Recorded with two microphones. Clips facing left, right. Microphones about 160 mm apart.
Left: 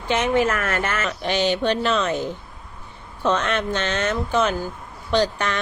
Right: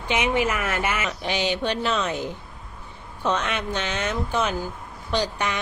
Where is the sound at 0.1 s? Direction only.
10° right (ahead or behind).